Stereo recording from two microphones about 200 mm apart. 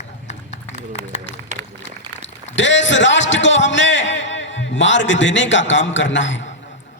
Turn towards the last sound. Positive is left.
turn(degrees=65)  # may be behind; listen again after turning